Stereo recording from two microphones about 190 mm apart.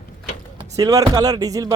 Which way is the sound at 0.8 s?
20° right (ahead or behind).